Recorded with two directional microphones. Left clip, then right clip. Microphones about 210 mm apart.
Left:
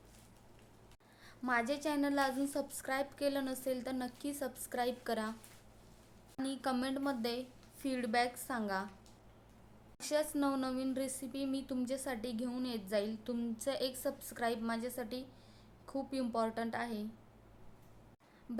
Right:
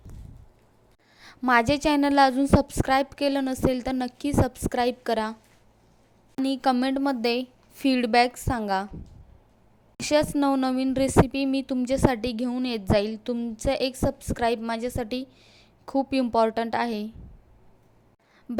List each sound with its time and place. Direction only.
1.2 s a woman's voice: 40° right (ahead or behind)
6.4 s a woman's voice: 35° right (ahead or behind)
10.0 s a woman's voice: 35° right (ahead or behind)